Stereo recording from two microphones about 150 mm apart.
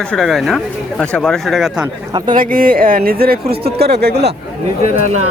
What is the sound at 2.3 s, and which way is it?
Speech, 70° right (ahead or behind).